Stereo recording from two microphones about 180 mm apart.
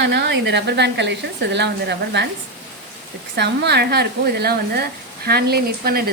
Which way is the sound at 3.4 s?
70° right (ahead or behind).